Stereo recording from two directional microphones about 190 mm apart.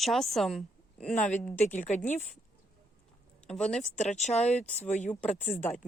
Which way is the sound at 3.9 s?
40° left (ahead or behind).